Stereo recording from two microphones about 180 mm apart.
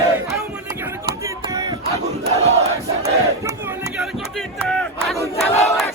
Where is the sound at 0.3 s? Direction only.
15° right (ahead or behind).